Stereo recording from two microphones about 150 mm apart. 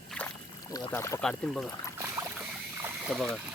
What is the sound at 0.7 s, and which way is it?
Speech, 20° left (ahead or behind).